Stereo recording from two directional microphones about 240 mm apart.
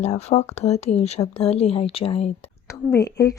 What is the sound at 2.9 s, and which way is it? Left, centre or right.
Speech, centre.